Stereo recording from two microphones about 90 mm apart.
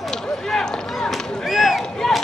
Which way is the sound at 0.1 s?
5° left (ahead or behind).